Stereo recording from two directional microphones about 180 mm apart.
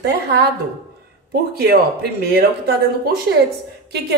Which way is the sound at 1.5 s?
60° right (ahead or behind).